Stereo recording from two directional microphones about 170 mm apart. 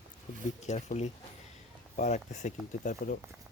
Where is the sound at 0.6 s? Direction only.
45° left (ahead or behind).